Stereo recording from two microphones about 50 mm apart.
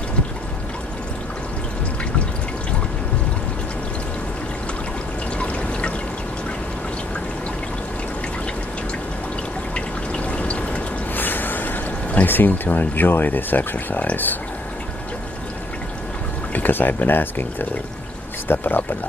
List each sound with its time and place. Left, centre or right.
5.4 s pour: left
9.8 s water: left
11.1 s a sound: left
12.3 s speech: left
16.5 s speech: left